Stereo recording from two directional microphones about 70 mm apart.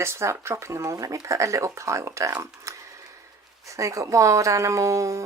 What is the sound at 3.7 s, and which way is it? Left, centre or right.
Speech, right.